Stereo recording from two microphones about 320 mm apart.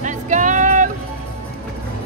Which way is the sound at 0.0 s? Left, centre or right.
Right.